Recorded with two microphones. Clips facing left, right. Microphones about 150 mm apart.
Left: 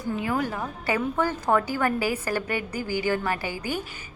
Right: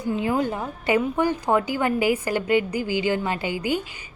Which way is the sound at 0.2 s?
25° right (ahead or behind).